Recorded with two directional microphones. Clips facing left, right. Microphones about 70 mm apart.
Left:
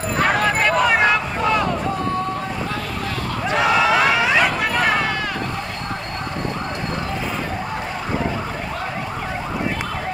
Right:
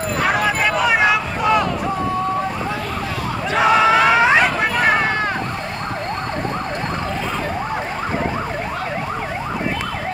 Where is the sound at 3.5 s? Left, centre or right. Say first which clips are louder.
Right 3 dB; right.